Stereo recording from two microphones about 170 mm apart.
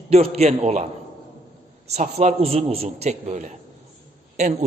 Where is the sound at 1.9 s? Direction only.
40° right (ahead or behind).